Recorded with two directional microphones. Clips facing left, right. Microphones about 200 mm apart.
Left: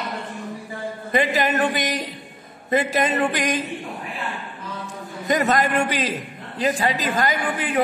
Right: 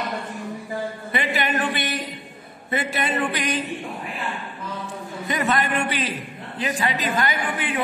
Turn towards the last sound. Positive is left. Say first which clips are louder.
# left 4 dB
turn(degrees=40)  # may be behind; listen again after turning